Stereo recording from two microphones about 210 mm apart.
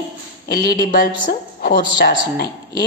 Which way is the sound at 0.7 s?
45° left (ahead or behind).